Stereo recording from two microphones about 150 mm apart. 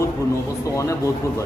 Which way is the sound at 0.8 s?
20° left (ahead or behind).